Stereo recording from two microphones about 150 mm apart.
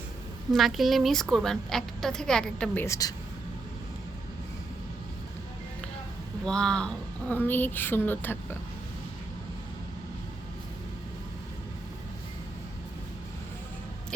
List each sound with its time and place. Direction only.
0.5 s a woman's voice: centre (ahead or behind)
2.8 s speech: 20° left (ahead or behind)
6.4 s speech: 5° left (ahead or behind)